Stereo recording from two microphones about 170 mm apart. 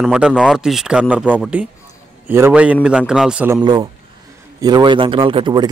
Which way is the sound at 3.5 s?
25° right (ahead or behind).